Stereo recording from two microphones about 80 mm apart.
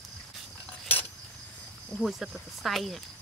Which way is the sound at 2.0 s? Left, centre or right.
Centre.